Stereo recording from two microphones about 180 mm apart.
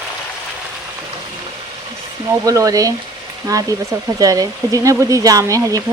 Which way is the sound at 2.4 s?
20° right (ahead or behind).